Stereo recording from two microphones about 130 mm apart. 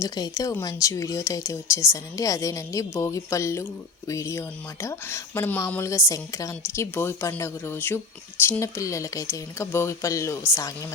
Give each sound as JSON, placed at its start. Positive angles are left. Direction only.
{"t": 0.0, "sound": "speech", "side_deg": 25}